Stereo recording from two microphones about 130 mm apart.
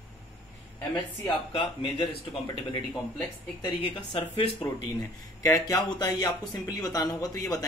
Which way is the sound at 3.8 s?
40° left (ahead or behind).